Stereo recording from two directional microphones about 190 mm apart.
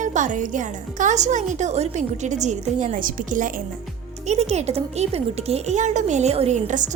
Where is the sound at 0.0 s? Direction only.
40° right (ahead or behind).